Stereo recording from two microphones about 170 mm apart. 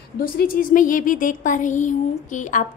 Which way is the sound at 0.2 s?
55° left (ahead or behind).